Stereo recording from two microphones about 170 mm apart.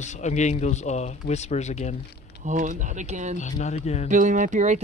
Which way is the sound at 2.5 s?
50° right (ahead or behind).